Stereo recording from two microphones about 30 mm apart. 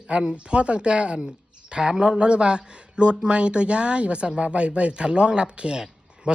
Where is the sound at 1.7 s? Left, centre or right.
Right.